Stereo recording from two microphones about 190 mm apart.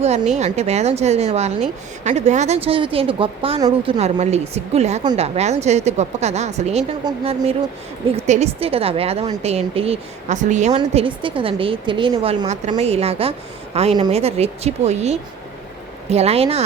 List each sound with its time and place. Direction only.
0.3 s a woman's voice: 35° right (ahead or behind)
10.8 s a woman's voice: 25° right (ahead or behind)